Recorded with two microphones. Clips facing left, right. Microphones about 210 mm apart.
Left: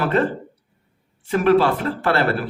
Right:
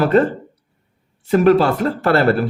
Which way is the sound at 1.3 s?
40° right (ahead or behind).